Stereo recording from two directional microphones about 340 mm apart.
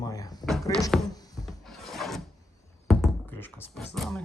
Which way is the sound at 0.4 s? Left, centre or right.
Centre.